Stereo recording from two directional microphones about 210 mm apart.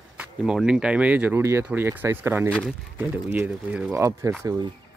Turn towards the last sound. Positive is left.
turn(degrees=-20)  # may be behind; listen again after turning